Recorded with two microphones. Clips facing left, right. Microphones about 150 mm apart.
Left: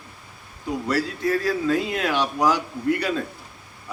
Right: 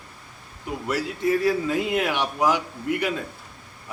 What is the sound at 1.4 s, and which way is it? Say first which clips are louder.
A man's voice: even; 20° right (ahead or behind).